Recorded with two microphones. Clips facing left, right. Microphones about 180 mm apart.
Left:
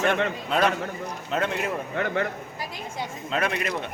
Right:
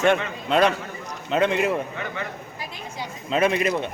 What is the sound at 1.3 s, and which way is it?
Speech, 90° right.